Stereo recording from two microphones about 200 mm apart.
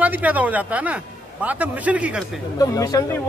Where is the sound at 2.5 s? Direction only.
15° left (ahead or behind).